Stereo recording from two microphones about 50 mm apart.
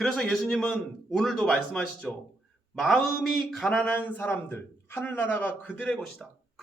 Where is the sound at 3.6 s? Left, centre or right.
Left.